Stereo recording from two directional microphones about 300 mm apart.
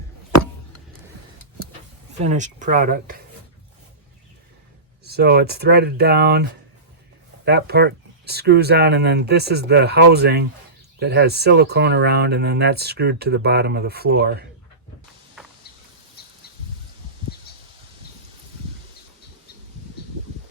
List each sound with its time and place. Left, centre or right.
2.2 s speech: right
5.0 s speech: right
7.4 s speech: right
15.4 s vehicle: centre
16.2 s a sound: left